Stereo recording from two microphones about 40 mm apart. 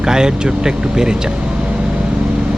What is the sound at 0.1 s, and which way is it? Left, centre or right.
Speech, centre.